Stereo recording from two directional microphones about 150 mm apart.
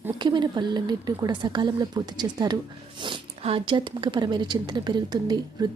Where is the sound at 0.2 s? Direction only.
30° right (ahead or behind).